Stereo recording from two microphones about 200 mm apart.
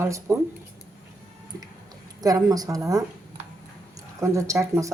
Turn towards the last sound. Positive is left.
turn(degrees=-15)  # may be behind; listen again after turning